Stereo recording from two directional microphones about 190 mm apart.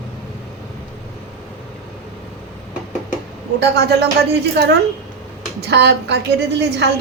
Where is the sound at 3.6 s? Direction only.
60° right (ahead or behind).